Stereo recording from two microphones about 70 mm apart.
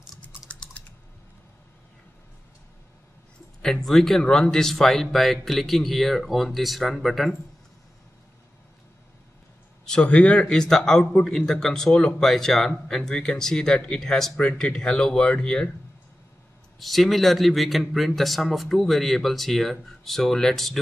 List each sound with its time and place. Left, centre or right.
0.5 s typing: centre
3.6 s a man's voice: centre
9.8 s a man's voice: centre
16.8 s a man's voice: centre